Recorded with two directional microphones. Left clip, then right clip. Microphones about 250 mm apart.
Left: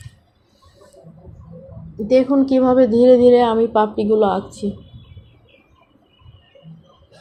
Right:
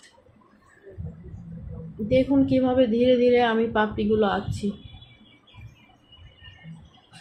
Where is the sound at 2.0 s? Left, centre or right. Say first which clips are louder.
Left 6 dB; left.